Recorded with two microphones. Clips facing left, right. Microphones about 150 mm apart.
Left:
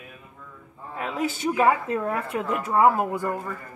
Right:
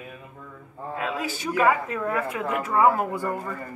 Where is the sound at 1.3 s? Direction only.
25° left (ahead or behind).